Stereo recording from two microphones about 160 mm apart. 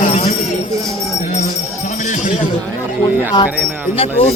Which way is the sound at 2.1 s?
50° left (ahead or behind).